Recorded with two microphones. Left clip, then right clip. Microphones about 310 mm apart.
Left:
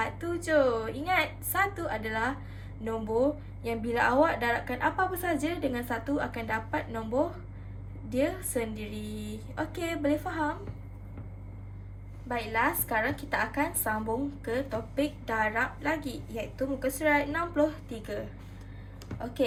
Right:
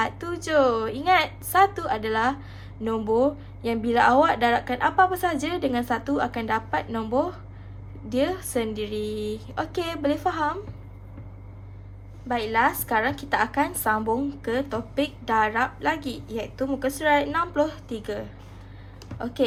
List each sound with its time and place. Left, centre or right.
0.0 s a woman's voice: right
12.3 s a woman's voice: right